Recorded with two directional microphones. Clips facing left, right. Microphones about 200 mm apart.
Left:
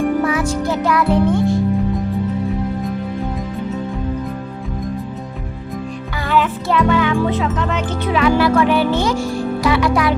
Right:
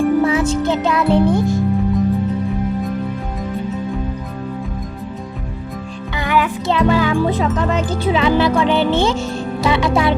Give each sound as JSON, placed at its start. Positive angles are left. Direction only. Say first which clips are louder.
{"t": 0.3, "sound": "music", "louder": "right 2 dB", "side_deg": -25}
{"t": 1.3, "sound": "speech", "louder": "even", "side_deg": -40}
{"t": 6.2, "sound": "music", "louder": "even", "side_deg": -10}
{"t": 6.7, "sound": "speech", "louder": "right 1 dB", "side_deg": -30}